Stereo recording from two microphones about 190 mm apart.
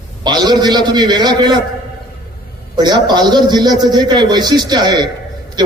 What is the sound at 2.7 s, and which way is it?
A man's voice, 20° right (ahead or behind).